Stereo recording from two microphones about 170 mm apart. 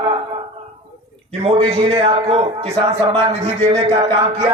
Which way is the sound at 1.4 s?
35° right (ahead or behind).